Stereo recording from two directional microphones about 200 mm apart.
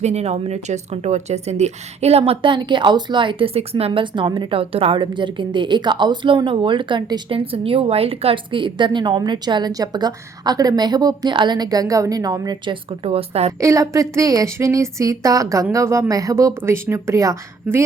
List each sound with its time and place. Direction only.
0.0 s speech: 35° right (ahead or behind)
13.6 s speech: 15° right (ahead or behind)